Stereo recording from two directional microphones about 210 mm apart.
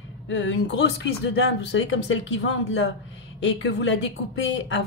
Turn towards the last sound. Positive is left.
turn(degrees=60)  # may be behind; listen again after turning